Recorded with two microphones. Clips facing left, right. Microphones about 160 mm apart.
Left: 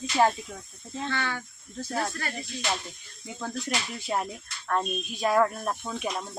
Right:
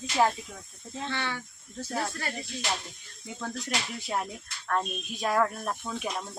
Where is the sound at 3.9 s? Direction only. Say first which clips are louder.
Left 2 dB; centre (ahead or behind).